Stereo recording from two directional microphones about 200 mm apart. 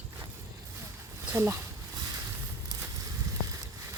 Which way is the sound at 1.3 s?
15° right (ahead or behind).